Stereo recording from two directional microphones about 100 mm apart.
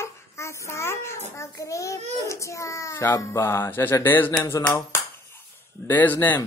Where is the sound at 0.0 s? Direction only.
30° left (ahead or behind).